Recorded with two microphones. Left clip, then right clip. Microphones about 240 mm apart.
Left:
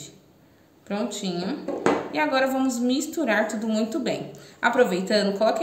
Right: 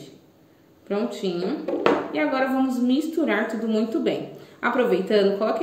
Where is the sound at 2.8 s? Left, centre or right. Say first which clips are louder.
Right 2 dB; left.